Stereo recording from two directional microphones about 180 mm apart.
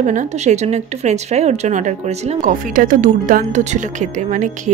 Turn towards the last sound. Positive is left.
turn(degrees=-45)  # may be behind; listen again after turning